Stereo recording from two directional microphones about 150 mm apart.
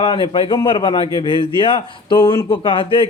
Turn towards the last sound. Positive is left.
turn(degrees=35)  # may be behind; listen again after turning